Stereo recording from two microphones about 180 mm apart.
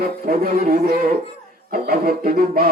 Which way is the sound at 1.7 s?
55° right (ahead or behind).